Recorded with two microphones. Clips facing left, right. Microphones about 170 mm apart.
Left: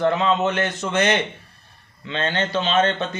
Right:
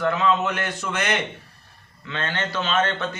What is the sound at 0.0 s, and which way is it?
A man's voice, 25° left (ahead or behind).